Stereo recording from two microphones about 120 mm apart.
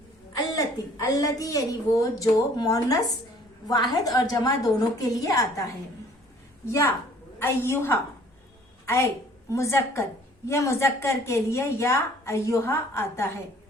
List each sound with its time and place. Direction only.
0.3 s a woman's voice: 30° left (ahead or behind)
7.3 s a woman's voice: 20° left (ahead or behind)
9.5 s a woman's voice: 25° left (ahead or behind)